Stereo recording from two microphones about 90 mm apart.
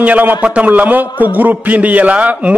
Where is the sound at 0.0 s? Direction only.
20° right (ahead or behind).